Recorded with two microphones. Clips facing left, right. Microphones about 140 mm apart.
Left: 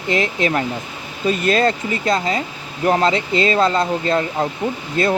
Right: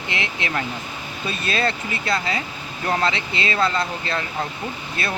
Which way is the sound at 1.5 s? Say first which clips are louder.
Left 6 dB; 40° left (ahead or behind).